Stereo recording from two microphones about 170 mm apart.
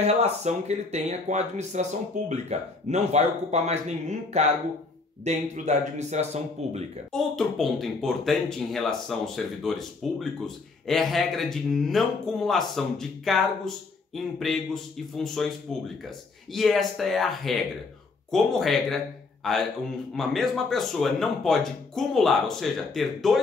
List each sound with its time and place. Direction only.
0.0 s speech: 40° right (ahead or behind)
7.1 s speech: centre (ahead or behind)
16.5 s speech: centre (ahead or behind)